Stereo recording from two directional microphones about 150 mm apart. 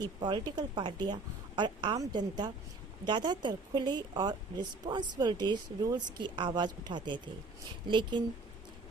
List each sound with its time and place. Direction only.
0.2 s a woman's voice: 30° right (ahead or behind)